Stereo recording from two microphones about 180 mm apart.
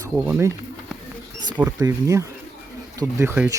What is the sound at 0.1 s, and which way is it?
Speech, 10° right (ahead or behind).